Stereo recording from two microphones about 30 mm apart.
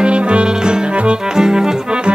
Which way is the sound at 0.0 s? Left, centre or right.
Right.